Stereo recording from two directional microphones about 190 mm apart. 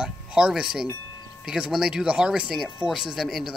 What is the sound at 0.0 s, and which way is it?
Speech, 5° right (ahead or behind).